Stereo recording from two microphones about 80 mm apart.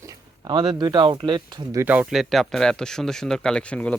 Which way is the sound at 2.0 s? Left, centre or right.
Centre.